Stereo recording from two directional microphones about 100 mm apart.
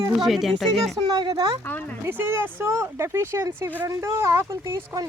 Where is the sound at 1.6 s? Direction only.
20° left (ahead or behind).